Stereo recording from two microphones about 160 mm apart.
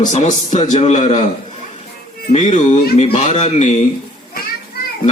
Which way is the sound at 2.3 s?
50° left (ahead or behind).